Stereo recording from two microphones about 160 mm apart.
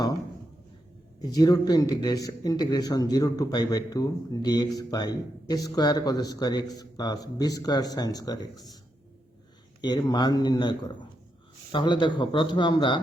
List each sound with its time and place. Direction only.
1.2 s a man's voice: 25° left (ahead or behind)
9.8 s a man's voice: 25° left (ahead or behind)